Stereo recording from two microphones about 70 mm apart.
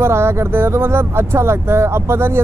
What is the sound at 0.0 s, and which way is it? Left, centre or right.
Speech, right.